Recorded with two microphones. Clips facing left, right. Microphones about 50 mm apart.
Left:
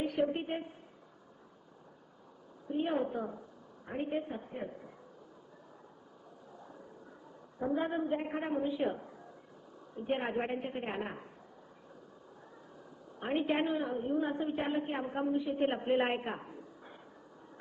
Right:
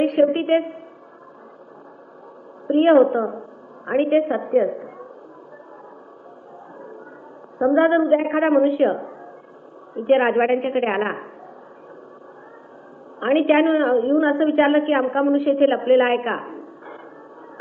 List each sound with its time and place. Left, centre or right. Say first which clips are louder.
0.0 s a sound: right 15 dB; right
2.6 s a woman's voice: right 19 dB; right
3.8 s a woman's voice: right 18 dB; right
7.6 s a woman's voice: right 17 dB; right
13.1 s a woman's voice: right 16 dB; right